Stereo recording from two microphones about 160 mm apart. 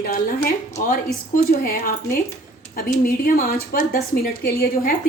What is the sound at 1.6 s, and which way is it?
A woman's voice, 65° left (ahead or behind).